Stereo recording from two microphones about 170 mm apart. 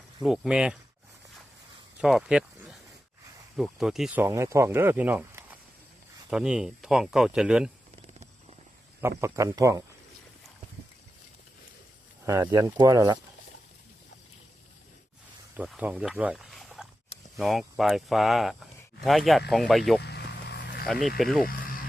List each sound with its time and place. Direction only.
0.2 s speech: 5° right (ahead or behind)
2.0 s speech: 5° right (ahead or behind)
8.0 s a sound: 35° right (ahead or behind)
9.0 s speech: 15° right (ahead or behind)
12.2 s speech: 20° right (ahead or behind)
15.5 s speech: 5° right (ahead or behind)
20.0 s vehicle: 75° left (ahead or behind)
20.8 s speech: centre (ahead or behind)